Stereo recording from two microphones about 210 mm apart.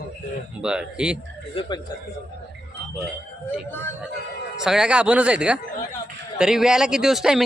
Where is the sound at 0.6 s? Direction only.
5° right (ahead or behind).